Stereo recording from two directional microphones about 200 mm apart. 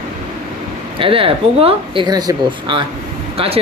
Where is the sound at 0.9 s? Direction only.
25° right (ahead or behind).